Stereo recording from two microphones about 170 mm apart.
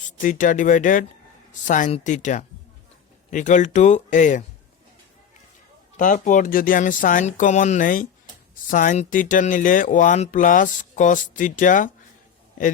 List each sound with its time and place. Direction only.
0.2 s speech: 50° left (ahead or behind)
6.0 s speech: 50° left (ahead or behind)